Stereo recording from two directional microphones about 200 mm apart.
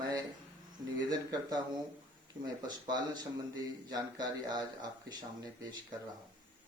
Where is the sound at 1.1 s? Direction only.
20° right (ahead or behind).